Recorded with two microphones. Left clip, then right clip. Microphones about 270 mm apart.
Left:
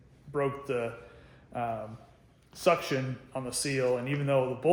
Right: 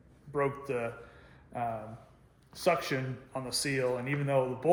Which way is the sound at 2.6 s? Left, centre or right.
Centre.